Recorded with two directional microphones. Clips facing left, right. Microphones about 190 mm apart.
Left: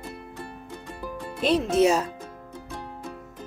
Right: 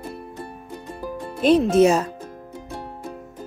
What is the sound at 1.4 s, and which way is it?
Speech, 50° right (ahead or behind).